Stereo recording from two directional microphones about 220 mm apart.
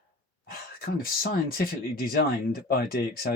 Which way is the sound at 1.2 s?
40° left (ahead or behind).